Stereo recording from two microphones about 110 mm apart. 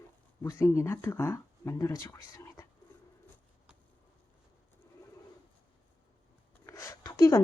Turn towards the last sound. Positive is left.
turn(degrees=30)  # may be behind; listen again after turning